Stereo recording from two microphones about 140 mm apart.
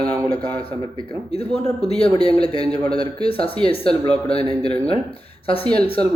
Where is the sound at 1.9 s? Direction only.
40° left (ahead or behind).